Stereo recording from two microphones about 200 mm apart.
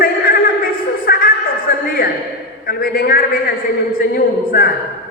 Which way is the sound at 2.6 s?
50° left (ahead or behind).